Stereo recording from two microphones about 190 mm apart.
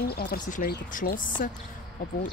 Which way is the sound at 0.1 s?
55° left (ahead or behind).